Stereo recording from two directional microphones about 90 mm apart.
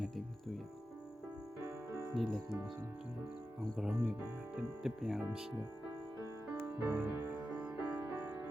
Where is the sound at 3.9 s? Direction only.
15° right (ahead or behind).